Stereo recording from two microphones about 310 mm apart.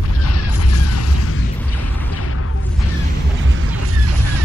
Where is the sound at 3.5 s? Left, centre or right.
Right.